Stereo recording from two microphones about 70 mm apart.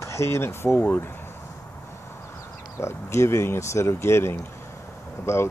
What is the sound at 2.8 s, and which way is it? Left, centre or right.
Speech, left.